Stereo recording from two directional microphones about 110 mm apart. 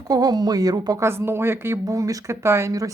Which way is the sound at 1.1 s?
20° right (ahead or behind).